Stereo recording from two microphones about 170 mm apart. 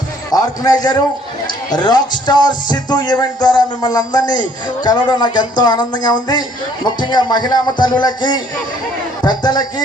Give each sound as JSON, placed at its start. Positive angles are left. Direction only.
{"t": 0.3, "sound": "a man's voice", "side_deg": 20}